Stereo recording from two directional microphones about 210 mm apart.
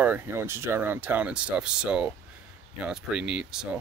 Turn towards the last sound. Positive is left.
turn(degrees=-5)  # may be behind; listen again after turning